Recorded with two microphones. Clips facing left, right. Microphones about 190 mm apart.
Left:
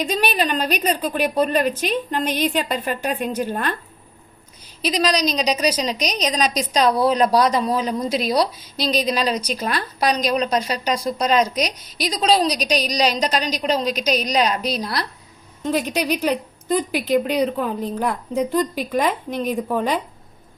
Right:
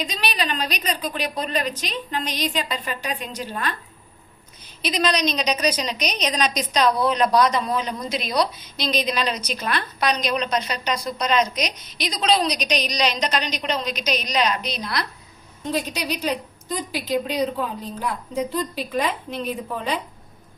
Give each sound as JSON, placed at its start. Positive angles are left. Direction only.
{"t": 0.0, "sound": "a woman's voice", "side_deg": 50}
{"t": 0.7, "sound": "a woman's voice", "side_deg": 10}
{"t": 1.0, "sound": "a woman's voice", "side_deg": 50}
{"t": 4.8, "sound": "a woman's voice", "side_deg": 35}
{"t": 15.9, "sound": "a woman's voice", "side_deg": 60}